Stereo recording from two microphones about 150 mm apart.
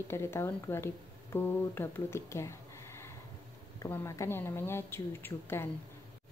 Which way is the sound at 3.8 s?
20° left (ahead or behind).